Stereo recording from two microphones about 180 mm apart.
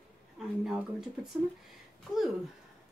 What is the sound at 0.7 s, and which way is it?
Speech, centre (ahead or behind).